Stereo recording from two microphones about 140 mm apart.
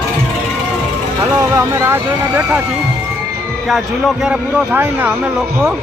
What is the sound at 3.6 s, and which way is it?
Speech, centre (ahead or behind).